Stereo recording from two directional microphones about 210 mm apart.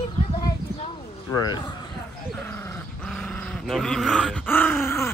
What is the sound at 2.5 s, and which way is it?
Dog, 10° left (ahead or behind).